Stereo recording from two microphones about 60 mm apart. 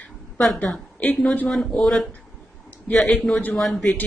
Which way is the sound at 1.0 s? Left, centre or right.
Left.